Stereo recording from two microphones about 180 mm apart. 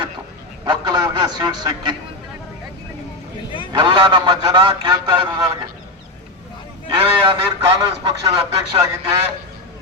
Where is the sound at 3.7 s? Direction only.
25° right (ahead or behind).